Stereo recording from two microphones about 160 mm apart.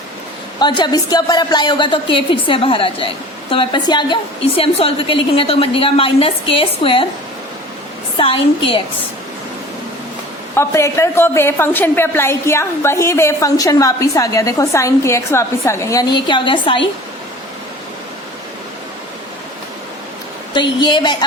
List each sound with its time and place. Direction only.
0.6 s a woman's voice: 30° left (ahead or behind)
8.1 s a woman's voice: 35° left (ahead or behind)
10.5 s a woman's voice: 15° left (ahead or behind); by 16.9 s 30° left (ahead or behind)
20.5 s a woman's voice: 30° left (ahead or behind)